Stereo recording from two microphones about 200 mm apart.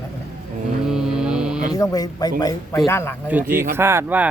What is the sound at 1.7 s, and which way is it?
Speech, 20° left (ahead or behind).